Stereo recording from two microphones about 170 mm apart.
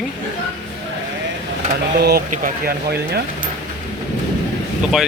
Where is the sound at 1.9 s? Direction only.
65° right (ahead or behind).